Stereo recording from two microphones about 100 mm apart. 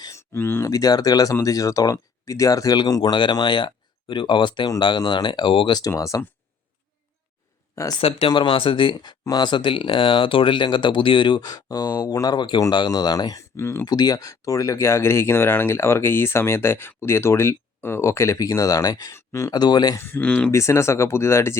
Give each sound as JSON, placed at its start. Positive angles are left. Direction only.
{"t": 0.0, "sound": "speech", "side_deg": 30}
{"t": 5.9, "sound": "speech", "side_deg": 35}
{"t": 8.3, "sound": "speech", "side_deg": 55}
{"t": 9.0, "sound": "speech", "side_deg": 40}
{"t": 13.8, "sound": "speech", "side_deg": 40}
{"t": 19.1, "sound": "speech", "side_deg": 30}
{"t": 19.5, "sound": "speech", "side_deg": 45}
{"t": 20.0, "sound": "speech", "side_deg": 20}
{"t": 20.5, "sound": "speech", "side_deg": 30}